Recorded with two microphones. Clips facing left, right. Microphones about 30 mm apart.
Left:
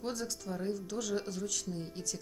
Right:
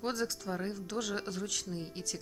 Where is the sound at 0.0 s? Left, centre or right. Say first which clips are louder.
Right 3 dB; right.